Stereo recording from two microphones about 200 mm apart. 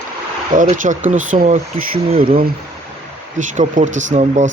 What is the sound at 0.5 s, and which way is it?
Speech, 40° right (ahead or behind).